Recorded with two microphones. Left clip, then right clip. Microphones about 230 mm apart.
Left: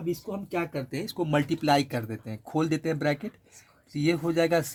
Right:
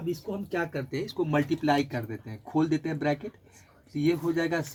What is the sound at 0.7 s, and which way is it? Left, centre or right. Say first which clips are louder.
Speech: even; left.